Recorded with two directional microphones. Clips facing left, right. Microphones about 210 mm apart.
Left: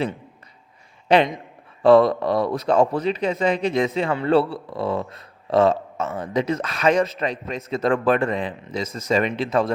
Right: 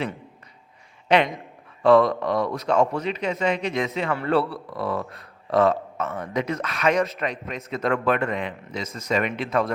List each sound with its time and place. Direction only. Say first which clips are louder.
1.0 s speech: left 3 dB; 30° left (ahead or behind)